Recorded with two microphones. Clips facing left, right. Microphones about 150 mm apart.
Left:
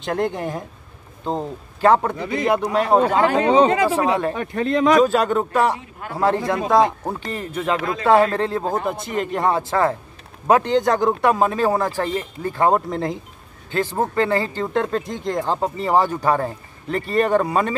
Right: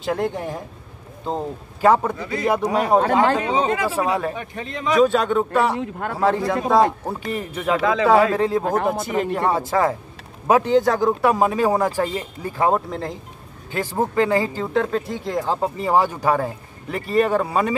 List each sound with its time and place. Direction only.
0.0 s a man's voice: 5° right (ahead or behind)
2.1 s speech: 20° left (ahead or behind)
2.4 s speech: 5° right (ahead or behind)
3.4 s speech: 75° left (ahead or behind)
5.0 s a man's voice: centre (ahead or behind)
5.8 s speech: 55° right (ahead or behind)
6.1 s a man's voice: centre (ahead or behind)
7.8 s speech: 90° right
8.3 s speech: 10° right (ahead or behind)